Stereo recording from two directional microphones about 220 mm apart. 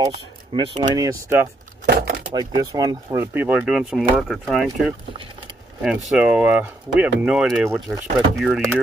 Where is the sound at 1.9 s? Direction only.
45° right (ahead or behind).